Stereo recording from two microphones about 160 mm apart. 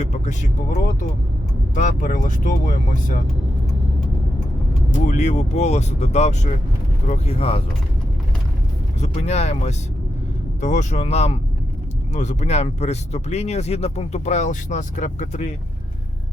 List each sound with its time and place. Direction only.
0.0 s speech: 45° left (ahead or behind)
1.7 s speech: 50° left (ahead or behind)
4.9 s speech: 45° left (ahead or behind)
9.0 s speech: 45° left (ahead or behind)